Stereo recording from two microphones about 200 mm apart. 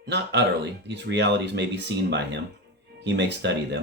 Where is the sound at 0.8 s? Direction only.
60° right (ahead or behind).